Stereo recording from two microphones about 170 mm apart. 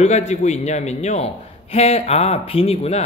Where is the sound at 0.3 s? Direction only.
40° left (ahead or behind).